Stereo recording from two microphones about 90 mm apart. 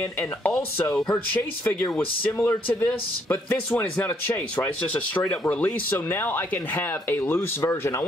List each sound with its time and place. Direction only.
1.1 s speech: 20° left (ahead or behind)